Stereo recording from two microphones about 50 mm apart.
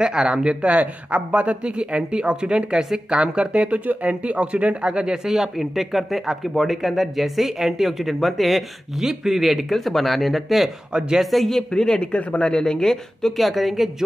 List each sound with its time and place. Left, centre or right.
0.0 s speech: centre
10.9 s speech: centre
11.1 s speech: centre